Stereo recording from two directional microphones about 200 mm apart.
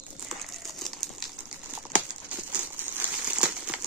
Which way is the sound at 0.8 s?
Centre (ahead or behind).